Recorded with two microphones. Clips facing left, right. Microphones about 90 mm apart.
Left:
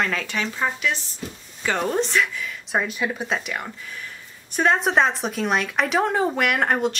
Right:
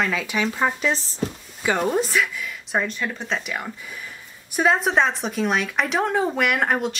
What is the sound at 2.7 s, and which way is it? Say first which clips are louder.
Speech: left 1 dB; 10° left (ahead or behind).